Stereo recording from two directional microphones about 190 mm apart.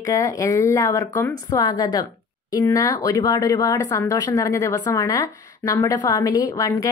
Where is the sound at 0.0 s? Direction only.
15° left (ahead or behind).